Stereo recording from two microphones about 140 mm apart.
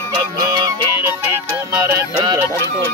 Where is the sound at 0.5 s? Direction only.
30° right (ahead or behind).